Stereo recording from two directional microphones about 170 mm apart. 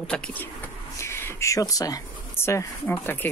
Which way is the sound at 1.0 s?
15° left (ahead or behind).